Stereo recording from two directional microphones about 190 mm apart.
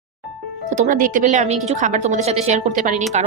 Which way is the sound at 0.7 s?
45° right (ahead or behind).